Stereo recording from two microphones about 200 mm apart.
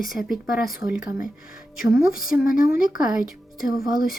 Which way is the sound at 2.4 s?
45° left (ahead or behind).